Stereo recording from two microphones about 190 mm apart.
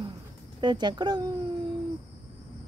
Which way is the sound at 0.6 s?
25° right (ahead or behind).